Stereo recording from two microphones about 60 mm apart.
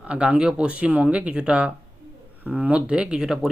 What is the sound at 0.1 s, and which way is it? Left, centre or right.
Speech, centre.